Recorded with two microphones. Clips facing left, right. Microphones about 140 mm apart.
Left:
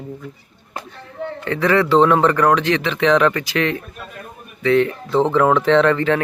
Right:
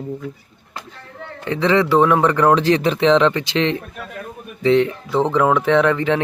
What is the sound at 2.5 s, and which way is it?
Speech, 35° right (ahead or behind).